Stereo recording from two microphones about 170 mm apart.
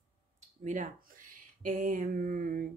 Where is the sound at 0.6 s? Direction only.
50° right (ahead or behind).